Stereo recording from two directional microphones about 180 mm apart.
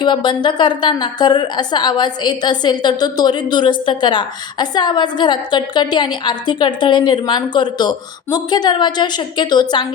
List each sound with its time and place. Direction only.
0.0 s a woman's voice: 25° left (ahead or behind)